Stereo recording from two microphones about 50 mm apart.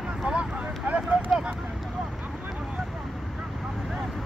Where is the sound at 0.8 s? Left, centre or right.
Right.